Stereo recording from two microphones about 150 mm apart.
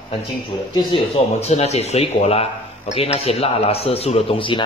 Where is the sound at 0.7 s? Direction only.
40° left (ahead or behind).